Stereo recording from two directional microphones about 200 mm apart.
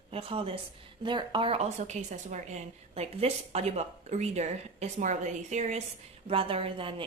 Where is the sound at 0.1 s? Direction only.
30° right (ahead or behind).